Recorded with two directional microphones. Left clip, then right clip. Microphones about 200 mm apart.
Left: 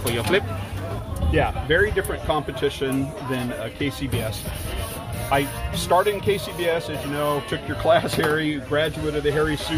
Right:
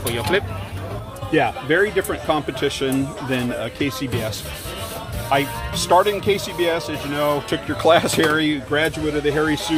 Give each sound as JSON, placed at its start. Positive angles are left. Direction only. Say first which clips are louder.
{"t": 0.3, "sound": "speech", "louder": "right 1 dB", "side_deg": 15}
{"t": 1.3, "sound": "speech", "louder": "right 3 dB", "side_deg": -30}
{"t": 1.8, "sound": "speech", "louder": "right 2 dB", "side_deg": -45}
{"t": 5.3, "sound": "speech", "louder": "right 3 dB", "side_deg": -40}